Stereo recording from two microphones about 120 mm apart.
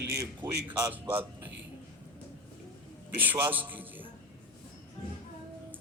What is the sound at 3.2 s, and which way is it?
Speech, 15° right (ahead or behind).